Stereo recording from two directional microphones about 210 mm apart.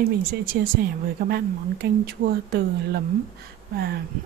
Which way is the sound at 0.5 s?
50° right (ahead or behind).